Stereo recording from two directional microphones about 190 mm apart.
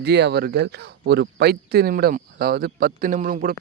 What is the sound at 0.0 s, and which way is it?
Speech, 65° right (ahead or behind).